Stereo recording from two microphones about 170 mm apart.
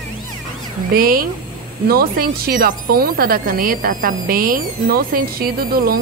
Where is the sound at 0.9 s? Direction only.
60° right (ahead or behind).